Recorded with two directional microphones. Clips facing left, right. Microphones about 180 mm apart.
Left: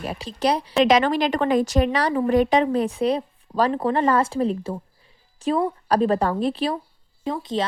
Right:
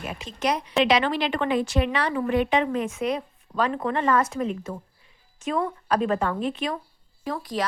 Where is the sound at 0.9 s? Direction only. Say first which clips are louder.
Left 4 dB; 45° left (ahead or behind).